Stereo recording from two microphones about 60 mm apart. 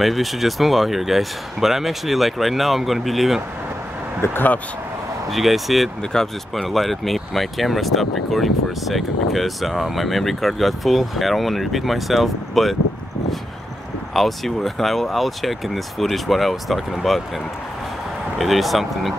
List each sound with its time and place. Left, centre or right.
0.0 s speech: centre
4.2 s speech: left
5.3 s speech: centre
14.1 s speech: centre
18.4 s speech: centre